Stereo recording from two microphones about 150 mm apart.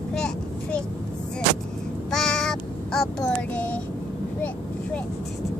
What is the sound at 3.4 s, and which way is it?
Child singing, 10° left (ahead or behind).